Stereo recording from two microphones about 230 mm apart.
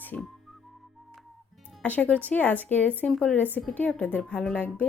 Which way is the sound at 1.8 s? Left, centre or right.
Centre.